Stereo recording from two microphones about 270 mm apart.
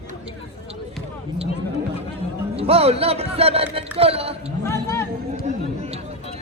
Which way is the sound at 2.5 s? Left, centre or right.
Right.